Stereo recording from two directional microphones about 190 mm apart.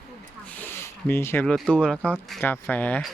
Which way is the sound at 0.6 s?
10° left (ahead or behind).